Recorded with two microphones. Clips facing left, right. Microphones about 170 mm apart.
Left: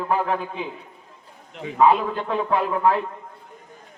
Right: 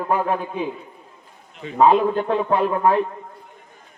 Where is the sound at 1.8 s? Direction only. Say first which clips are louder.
Right 3 dB; 20° right (ahead or behind).